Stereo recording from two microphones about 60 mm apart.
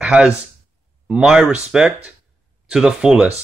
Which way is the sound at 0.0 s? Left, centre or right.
Centre.